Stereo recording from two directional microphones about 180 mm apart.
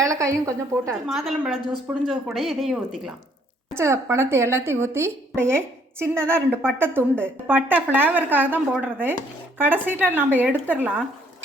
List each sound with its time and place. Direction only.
0.0 s a woman's voice: 15° right (ahead or behind)
1.0 s speech: centre (ahead or behind)
3.8 s a woman's voice: 15° right (ahead or behind)